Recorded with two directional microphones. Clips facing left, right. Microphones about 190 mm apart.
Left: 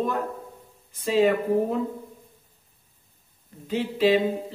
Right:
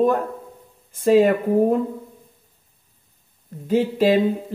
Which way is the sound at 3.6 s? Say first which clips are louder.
Right 5 dB; 45° right (ahead or behind).